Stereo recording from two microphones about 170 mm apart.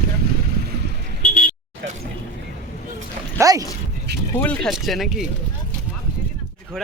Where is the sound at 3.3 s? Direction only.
20° right (ahead or behind).